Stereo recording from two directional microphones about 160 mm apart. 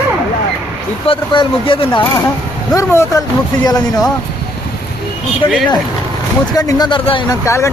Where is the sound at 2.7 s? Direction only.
20° left (ahead or behind).